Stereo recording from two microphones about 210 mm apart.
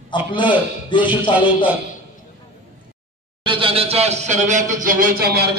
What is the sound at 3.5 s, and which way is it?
A man's voice, 25° right (ahead or behind).